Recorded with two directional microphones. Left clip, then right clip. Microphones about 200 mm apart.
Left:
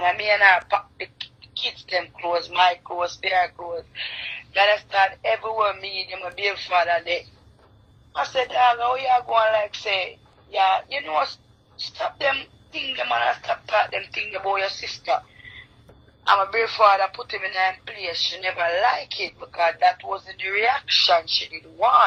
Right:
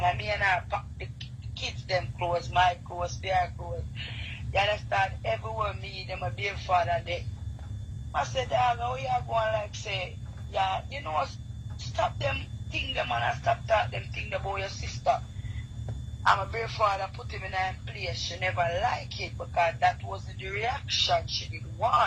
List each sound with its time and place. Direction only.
0.0 s speech: 20° left (ahead or behind)
4.5 s speech: 20° left (ahead or behind)
16.2 s speech: 20° left (ahead or behind)